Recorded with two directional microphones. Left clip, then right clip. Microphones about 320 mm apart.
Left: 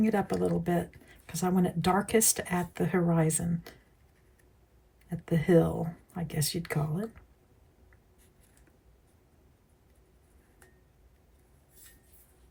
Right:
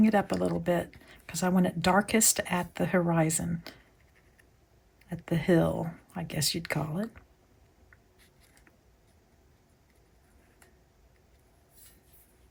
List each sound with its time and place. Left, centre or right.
0.0 s speech: centre
5.0 s speech: centre